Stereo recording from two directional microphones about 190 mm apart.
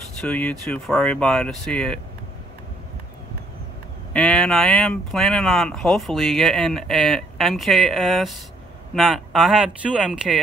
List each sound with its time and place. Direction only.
0.2 s speech: 10° left (ahead or behind)
4.1 s speech: 5° left (ahead or behind)